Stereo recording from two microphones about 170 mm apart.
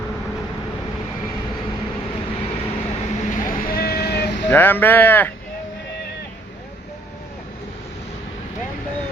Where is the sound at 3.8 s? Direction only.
65° left (ahead or behind); by 4.5 s 80° left.